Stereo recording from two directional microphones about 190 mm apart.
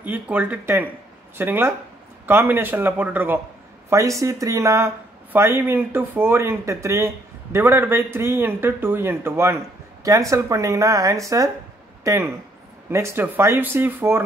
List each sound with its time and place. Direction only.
0.0 s speech: 10° right (ahead or behind)